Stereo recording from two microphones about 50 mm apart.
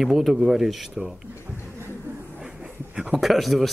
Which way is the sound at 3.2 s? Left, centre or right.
Centre.